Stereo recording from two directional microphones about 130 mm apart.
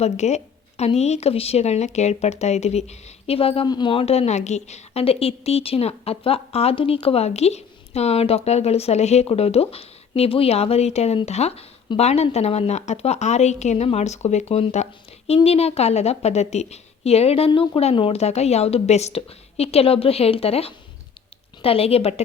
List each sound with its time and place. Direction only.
0.0 s a woman's voice: 60° left (ahead or behind)